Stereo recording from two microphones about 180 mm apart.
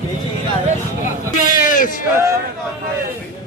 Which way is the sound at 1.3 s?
45° left (ahead or behind).